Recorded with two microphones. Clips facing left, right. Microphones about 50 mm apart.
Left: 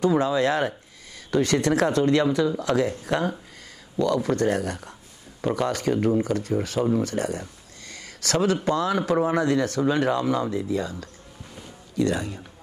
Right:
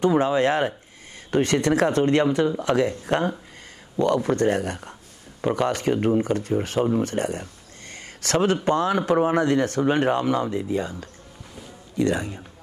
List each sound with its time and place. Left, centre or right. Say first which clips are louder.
0.1 s speech: right 2 dB; right
7.9 s a sound: right 2 dB; right
8.6 s a man's voice: right 2 dB; right